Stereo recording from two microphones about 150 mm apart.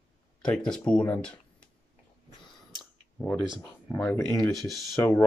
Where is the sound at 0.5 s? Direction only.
5° left (ahead or behind).